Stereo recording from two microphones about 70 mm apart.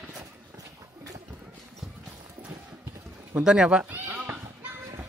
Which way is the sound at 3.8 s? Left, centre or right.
Right.